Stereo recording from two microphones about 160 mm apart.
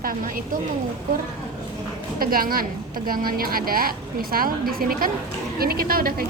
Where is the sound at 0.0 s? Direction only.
65° right (ahead or behind).